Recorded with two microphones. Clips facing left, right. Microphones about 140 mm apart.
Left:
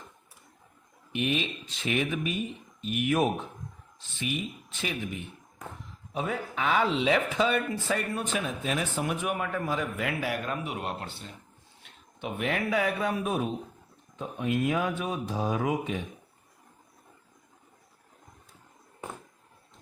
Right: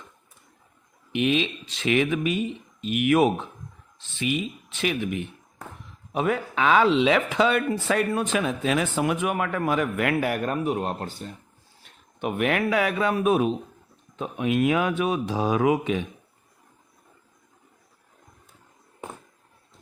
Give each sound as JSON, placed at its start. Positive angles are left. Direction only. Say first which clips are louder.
{"t": 1.1, "sound": "a man's voice", "louder": "right 6 dB", "side_deg": -90}
{"t": 12.2, "sound": "a man's voice", "louder": "right 6 dB", "side_deg": -65}